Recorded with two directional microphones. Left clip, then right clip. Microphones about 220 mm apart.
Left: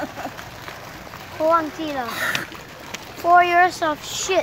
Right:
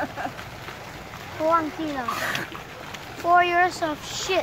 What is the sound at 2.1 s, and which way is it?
Speech, 35° left (ahead or behind).